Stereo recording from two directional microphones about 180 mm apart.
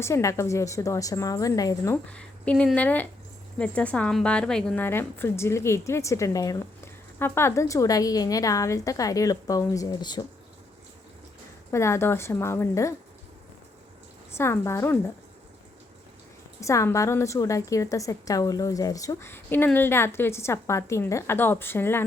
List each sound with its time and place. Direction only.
0.0 s a woman's voice: 15° left (ahead or behind)
11.7 s a woman's voice: 15° left (ahead or behind)
14.3 s a woman's voice: 15° left (ahead or behind)
16.6 s a woman's voice: 15° left (ahead or behind)